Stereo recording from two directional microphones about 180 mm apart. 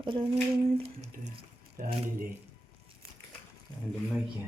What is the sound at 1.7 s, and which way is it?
Speech, 50° right (ahead or behind).